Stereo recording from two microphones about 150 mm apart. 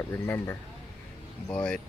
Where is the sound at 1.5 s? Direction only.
5° left (ahead or behind).